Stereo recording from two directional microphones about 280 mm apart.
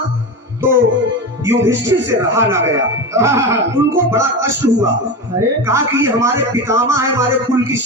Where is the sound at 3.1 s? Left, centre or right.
Centre.